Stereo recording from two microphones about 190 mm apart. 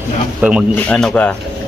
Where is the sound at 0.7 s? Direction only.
5° left (ahead or behind).